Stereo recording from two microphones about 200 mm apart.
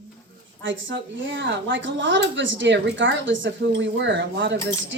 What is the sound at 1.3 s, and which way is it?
A woman's voice, 65° right (ahead or behind).